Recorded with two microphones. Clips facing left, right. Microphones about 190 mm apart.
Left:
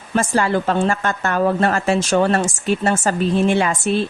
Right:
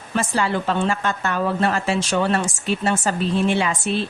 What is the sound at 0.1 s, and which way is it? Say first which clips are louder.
A woman's voice: left 4 dB; 45° left (ahead or behind).